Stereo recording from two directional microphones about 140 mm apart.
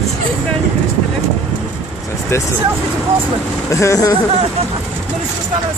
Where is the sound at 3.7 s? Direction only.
20° left (ahead or behind).